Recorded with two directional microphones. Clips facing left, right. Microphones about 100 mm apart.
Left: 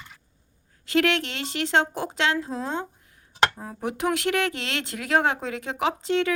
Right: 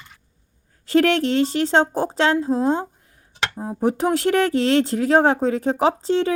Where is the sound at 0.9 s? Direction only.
35° right (ahead or behind).